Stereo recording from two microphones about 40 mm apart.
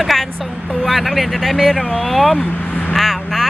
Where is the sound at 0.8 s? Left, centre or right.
Centre.